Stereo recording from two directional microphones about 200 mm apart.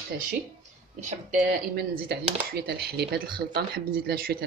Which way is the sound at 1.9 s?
50° right (ahead or behind).